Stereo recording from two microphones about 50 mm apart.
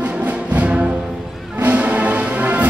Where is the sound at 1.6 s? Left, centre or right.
Right.